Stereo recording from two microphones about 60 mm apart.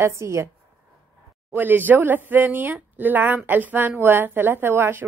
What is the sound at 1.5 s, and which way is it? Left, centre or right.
A woman's voice, right.